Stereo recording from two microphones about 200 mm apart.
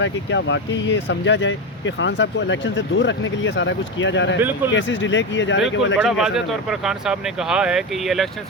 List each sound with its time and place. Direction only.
0.0 s speech: 65° left (ahead or behind)
4.4 s speech: 10° right (ahead or behind)
4.7 s speech: 65° left (ahead or behind)
6.0 s speech: centre (ahead or behind)